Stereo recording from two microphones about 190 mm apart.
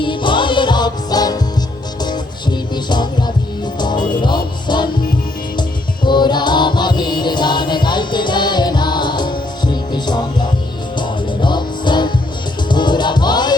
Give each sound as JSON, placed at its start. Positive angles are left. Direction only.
{"t": 0.0, "sound": "music", "side_deg": 25}
{"t": 6.1, "sound": "music", "side_deg": 25}